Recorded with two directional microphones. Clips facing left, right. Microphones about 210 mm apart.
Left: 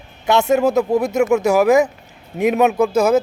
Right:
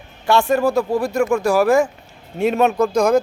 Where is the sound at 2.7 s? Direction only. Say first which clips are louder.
Left 1 dB; 5° left (ahead or behind).